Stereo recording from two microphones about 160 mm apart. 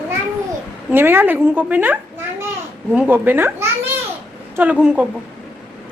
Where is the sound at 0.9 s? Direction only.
15° right (ahead or behind).